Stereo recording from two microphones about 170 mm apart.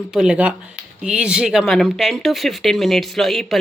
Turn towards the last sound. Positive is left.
turn(degrees=0)  # may be behind; listen again after turning